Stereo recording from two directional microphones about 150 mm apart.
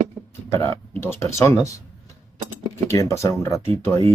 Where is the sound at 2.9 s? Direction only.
20° left (ahead or behind).